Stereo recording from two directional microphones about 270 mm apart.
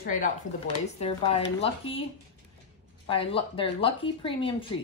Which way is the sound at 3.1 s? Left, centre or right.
Centre.